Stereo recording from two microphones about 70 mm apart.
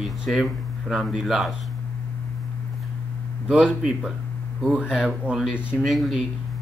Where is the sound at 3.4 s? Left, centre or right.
Centre.